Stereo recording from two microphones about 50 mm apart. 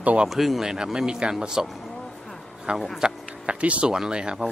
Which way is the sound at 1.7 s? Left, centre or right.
Centre.